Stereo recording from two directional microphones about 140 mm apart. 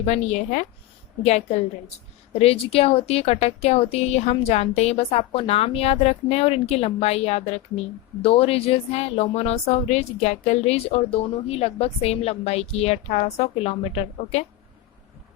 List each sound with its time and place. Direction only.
0.0 s a woman's voice: 50° left (ahead or behind)